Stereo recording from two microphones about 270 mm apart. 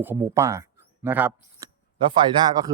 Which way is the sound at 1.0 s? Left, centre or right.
Centre.